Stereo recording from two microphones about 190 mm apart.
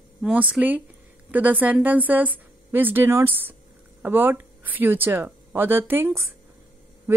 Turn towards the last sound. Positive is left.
turn(degrees=-10)  # may be behind; listen again after turning